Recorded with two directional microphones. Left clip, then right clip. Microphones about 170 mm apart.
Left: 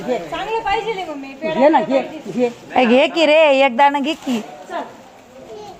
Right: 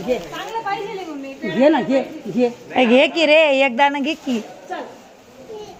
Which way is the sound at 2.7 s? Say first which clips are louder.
Left 1 dB; centre (ahead or behind).